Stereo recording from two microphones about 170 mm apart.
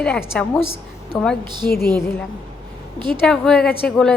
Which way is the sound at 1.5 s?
25° right (ahead or behind).